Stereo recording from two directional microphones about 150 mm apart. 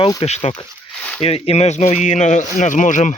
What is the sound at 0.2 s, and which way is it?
Speech, 40° left (ahead or behind).